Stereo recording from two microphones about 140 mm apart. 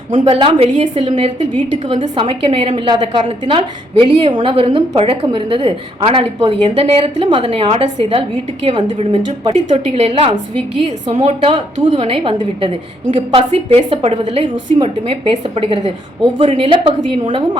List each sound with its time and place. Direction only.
0.2 s a woman's voice: 35° right (ahead or behind)